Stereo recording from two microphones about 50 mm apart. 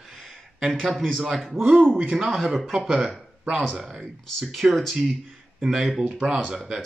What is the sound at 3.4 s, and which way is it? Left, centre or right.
Speech, right.